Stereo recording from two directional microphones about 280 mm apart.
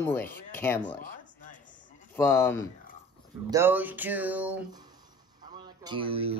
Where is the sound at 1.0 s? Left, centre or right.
Left.